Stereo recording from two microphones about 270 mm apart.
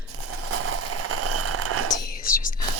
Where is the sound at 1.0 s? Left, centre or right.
Right.